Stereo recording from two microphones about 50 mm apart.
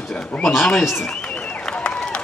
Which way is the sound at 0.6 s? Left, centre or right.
Centre.